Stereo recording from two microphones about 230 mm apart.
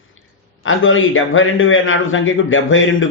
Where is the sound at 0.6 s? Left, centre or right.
Left.